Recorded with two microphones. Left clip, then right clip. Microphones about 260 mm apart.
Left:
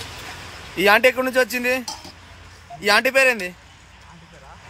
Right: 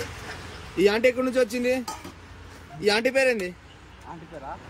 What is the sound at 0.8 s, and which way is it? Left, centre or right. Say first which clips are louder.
Speech: left 5 dB; centre.